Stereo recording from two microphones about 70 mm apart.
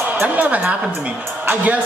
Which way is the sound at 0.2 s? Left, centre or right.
Right.